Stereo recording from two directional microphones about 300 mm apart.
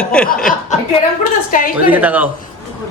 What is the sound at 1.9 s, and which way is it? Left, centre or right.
Speech, centre.